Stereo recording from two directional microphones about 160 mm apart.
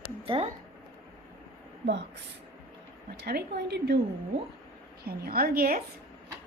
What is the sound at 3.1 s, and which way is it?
Speech, 85° right.